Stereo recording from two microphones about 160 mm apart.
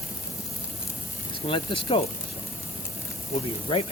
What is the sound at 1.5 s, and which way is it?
Speech, 30° left (ahead or behind).